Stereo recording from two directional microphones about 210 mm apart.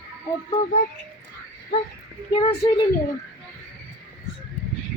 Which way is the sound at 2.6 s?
20° left (ahead or behind).